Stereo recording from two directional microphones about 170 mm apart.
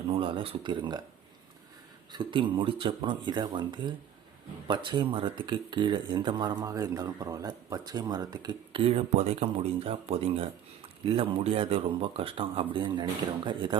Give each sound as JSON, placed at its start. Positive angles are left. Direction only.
{"t": 0.1, "sound": "speech", "side_deg": -30}
{"t": 2.1, "sound": "speech", "side_deg": -30}